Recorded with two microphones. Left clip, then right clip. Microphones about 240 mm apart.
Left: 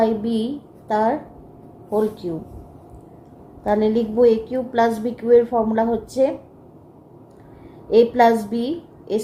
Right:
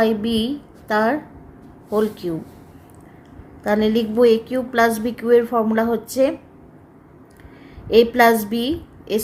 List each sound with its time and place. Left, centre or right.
0.0 s a woman's voice: right
3.6 s a woman's voice: right
7.9 s a woman's voice: right